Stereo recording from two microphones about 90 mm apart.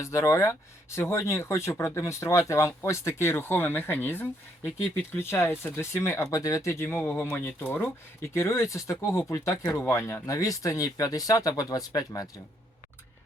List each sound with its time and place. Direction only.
0.0 s speech: 35° left (ahead or behind)